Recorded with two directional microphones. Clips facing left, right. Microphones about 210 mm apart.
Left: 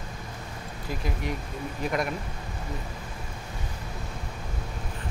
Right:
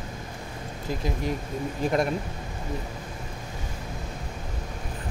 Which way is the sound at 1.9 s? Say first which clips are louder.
Right 4 dB; 30° right (ahead or behind).